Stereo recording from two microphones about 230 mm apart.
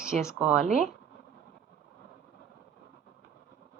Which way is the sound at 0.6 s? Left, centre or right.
Right.